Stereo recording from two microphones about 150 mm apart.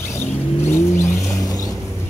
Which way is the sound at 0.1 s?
15° left (ahead or behind).